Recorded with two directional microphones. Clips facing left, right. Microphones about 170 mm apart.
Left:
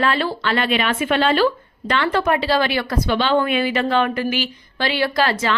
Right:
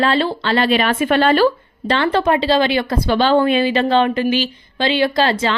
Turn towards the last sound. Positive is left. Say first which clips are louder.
# right 2 dB
turn(degrees=-25)  # may be behind; listen again after turning